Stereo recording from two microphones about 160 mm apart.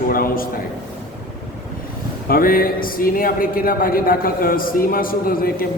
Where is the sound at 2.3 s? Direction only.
65° left (ahead or behind).